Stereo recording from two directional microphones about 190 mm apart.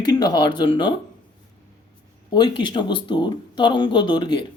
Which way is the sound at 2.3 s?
25° left (ahead or behind).